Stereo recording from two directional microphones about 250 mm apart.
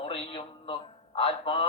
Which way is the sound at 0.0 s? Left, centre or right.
Left.